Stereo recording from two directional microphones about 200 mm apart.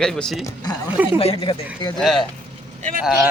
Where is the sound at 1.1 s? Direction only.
25° left (ahead or behind).